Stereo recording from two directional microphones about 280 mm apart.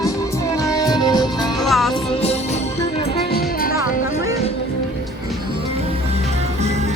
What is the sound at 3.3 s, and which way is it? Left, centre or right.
Music, left.